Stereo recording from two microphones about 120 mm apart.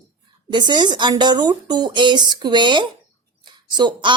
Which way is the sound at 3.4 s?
40° right (ahead or behind).